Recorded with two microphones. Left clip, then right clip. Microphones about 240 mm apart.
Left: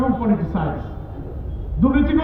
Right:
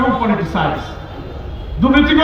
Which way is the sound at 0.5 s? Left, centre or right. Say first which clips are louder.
Right 8 dB; left.